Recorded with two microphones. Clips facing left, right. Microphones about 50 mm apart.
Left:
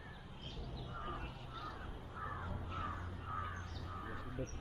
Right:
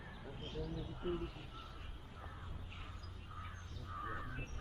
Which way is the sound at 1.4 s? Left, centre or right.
Left.